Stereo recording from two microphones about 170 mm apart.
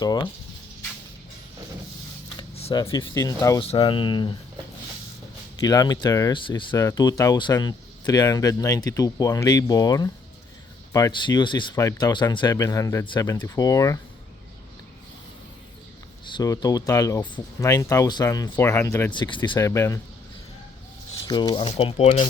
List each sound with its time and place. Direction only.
0.0 s speech: 25° left (ahead or behind)
2.3 s a sound: 30° left (ahead or behind)
3.0 s speech: 20° left (ahead or behind)
3.6 s speech: 35° left (ahead or behind)
5.6 s speech: 20° left (ahead or behind)
16.2 s speech: 25° left (ahead or behind)
19.1 s speech: 25° left (ahead or behind)
21.2 s speech: 25° left (ahead or behind)